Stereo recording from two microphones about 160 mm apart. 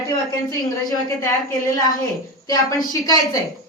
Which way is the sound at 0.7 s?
20° left (ahead or behind).